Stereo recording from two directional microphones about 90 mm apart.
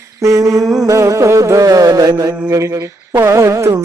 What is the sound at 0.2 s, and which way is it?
Music, 35° right (ahead or behind).